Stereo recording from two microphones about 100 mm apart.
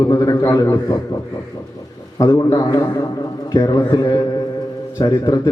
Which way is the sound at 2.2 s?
40° left (ahead or behind).